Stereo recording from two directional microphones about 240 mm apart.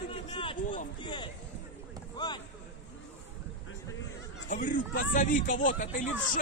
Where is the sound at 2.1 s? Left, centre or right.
Centre.